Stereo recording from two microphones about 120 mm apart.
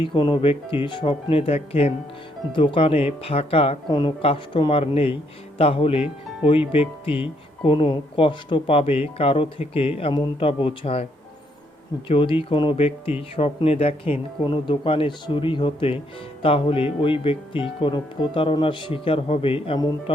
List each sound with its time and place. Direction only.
0.0 s speech: 40° left (ahead or behind)
2.5 s speech: 45° left (ahead or behind)
3.8 s speech: 40° left (ahead or behind)
12.0 s speech: 50° left (ahead or behind)
12.7 s speech: 55° left (ahead or behind)